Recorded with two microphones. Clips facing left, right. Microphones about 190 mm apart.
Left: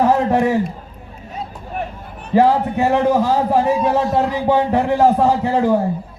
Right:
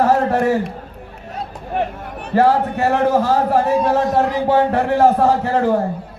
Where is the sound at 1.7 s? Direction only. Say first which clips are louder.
Right 6 dB; 75° right (ahead or behind).